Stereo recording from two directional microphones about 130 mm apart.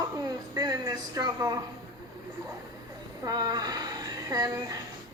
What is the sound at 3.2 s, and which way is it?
A woman's voice, 30° right (ahead or behind).